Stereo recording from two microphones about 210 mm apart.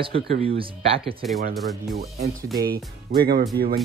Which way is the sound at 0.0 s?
30° right (ahead or behind).